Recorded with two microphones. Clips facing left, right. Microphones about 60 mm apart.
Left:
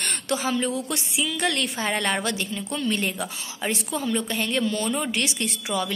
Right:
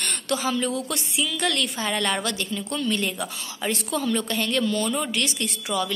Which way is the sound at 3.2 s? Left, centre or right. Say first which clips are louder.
Even; centre.